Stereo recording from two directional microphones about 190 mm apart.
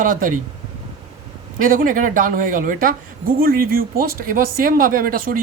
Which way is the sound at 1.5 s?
45° right (ahead or behind).